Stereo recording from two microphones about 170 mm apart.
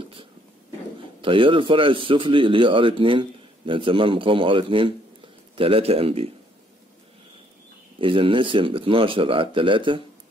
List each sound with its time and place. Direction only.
1.2 s speech: 30° right (ahead or behind)
8.0 s speech: 30° right (ahead or behind)